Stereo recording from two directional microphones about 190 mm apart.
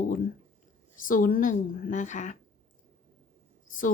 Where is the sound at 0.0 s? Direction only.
45° left (ahead or behind).